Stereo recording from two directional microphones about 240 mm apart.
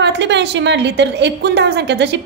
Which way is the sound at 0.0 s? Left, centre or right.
Right.